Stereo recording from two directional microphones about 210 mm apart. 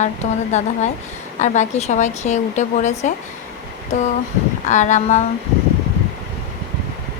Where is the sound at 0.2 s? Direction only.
30° left (ahead or behind).